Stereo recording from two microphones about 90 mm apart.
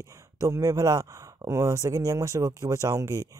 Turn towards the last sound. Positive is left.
turn(degrees=-40)  # may be behind; listen again after turning